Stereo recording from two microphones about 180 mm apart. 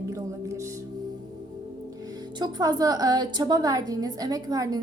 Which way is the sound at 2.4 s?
20° right (ahead or behind).